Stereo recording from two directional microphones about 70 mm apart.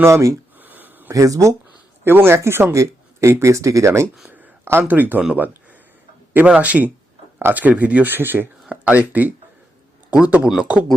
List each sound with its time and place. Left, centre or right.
0.0 s speech: right
0.6 s a sound: right
1.1 s speech: right
2.0 s speech: right
2.7 s speech: right
4.3 s a sound: right
4.8 s speech: right
6.3 s speech: right
8.7 s speech: right